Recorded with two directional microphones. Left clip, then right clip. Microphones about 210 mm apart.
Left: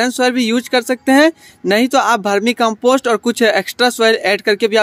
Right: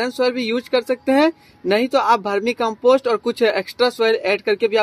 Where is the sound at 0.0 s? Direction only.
40° left (ahead or behind).